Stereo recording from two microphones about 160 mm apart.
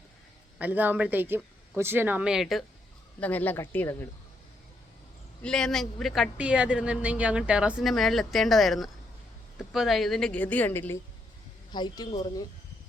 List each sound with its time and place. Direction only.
0.6 s speech: 10° right (ahead or behind)
3.2 s a woman's voice: 10° left (ahead or behind)
5.4 s a woman's voice: 5° left (ahead or behind)
11.7 s speech: 30° left (ahead or behind)